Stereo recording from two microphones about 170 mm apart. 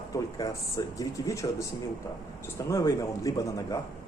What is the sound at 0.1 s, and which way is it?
A man's voice, 20° left (ahead or behind).